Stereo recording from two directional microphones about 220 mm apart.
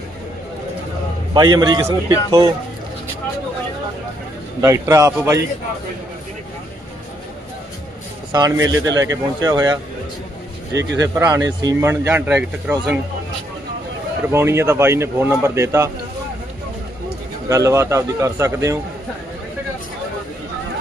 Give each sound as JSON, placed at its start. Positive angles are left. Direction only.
{"t": 1.3, "sound": "a man's voice", "side_deg": -20}
{"t": 4.6, "sound": "a man's voice", "side_deg": -15}
{"t": 8.3, "sound": "a man's voice", "side_deg": -15}
{"t": 11.0, "sound": "a man's voice", "side_deg": -10}
{"t": 14.3, "sound": "a man's voice", "side_deg": -10}
{"t": 17.5, "sound": "a man's voice", "side_deg": -15}